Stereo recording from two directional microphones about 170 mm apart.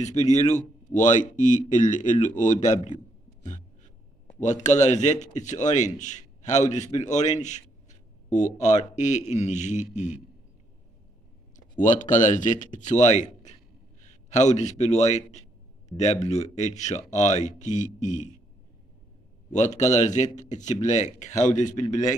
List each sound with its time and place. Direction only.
0.0 s speech: 40° left (ahead or behind)
4.4 s a man's voice: 45° left (ahead or behind)
11.8 s a man's voice: 50° left (ahead or behind)
19.5 s speech: 45° left (ahead or behind)